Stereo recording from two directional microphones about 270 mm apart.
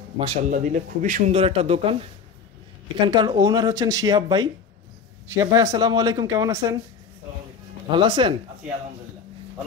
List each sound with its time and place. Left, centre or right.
0.2 s a man's voice: right
3.1 s speech: centre
7.9 s speech: centre